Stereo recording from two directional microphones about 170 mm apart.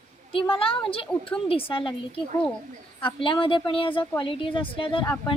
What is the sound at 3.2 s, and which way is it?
A woman's voice, 30° left (ahead or behind).